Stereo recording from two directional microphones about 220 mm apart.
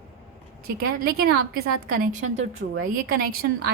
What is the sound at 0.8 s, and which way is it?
A woman's voice, 45° right (ahead or behind).